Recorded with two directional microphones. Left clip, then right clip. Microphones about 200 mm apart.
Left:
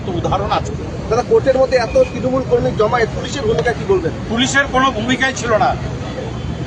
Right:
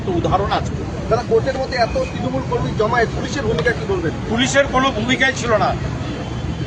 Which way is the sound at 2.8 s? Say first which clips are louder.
Left 2 dB; 55° left (ahead or behind).